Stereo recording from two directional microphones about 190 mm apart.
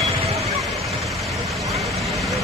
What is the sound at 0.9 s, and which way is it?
Vehicle, centre (ahead or behind).